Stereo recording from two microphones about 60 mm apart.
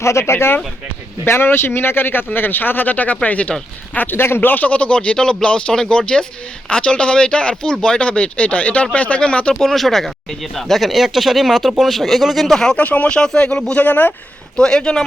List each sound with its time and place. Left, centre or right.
0.0 s speech: left
3.9 s speech: left
9.6 s speech: centre
12.8 s speech: left
13.8 s speech: left
14.5 s speech: centre